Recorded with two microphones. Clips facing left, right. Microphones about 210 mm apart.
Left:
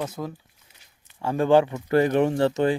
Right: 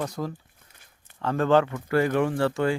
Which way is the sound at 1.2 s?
10° left (ahead or behind).